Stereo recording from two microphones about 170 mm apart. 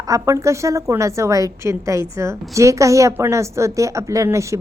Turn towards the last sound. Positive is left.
turn(degrees=-15)  # may be behind; listen again after turning